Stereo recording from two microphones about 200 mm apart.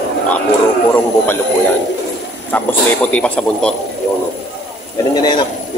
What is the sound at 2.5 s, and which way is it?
Speech, 10° left (ahead or behind).